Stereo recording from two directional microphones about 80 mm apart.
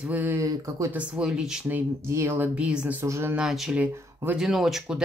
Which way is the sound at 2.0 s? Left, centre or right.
Right.